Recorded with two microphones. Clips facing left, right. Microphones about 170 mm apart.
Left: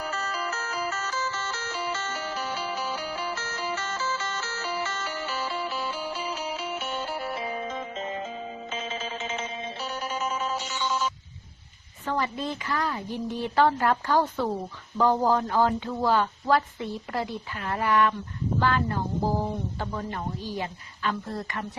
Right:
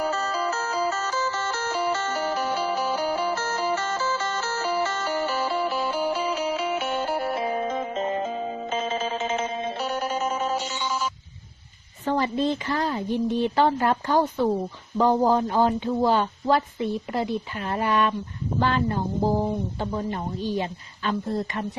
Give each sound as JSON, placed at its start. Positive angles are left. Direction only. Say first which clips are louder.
{"t": 0.0, "sound": "music", "louder": "right 6 dB", "side_deg": -30}
{"t": 2.1, "sound": "music", "louder": "right 7 dB", "side_deg": -40}
{"t": 3.9, "sound": "music", "louder": "right 5 dB", "side_deg": -50}
{"t": 7.1, "sound": "music", "louder": "right 6 dB", "side_deg": -50}
{"t": 10.8, "sound": "telephone", "louder": "left 3 dB", "side_deg": -5}
{"t": 12.0, "sound": "speech", "louder": "right 6 dB", "side_deg": -30}